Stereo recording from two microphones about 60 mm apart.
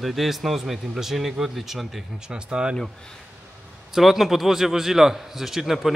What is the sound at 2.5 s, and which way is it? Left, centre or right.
Speech, centre.